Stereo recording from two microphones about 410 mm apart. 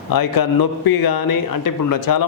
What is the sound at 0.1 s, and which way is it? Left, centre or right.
A man's voice, left.